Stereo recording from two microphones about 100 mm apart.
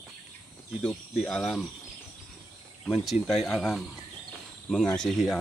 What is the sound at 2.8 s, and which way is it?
Speech, centre (ahead or behind).